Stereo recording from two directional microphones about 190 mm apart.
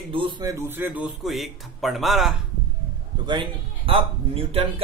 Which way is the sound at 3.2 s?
25° right (ahead or behind).